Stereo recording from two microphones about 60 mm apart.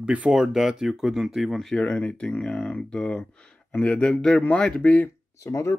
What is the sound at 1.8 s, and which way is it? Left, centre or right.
Speech, left.